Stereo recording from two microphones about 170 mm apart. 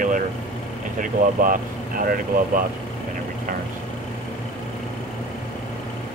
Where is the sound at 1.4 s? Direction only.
55° right (ahead or behind).